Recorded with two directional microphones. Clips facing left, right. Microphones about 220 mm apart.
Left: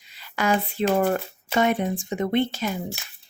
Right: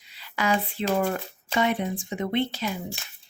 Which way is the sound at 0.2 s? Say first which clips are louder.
Left 2 dB; 45° left (ahead or behind).